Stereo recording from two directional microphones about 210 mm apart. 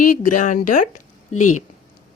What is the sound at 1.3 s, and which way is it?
Speech, 90° left.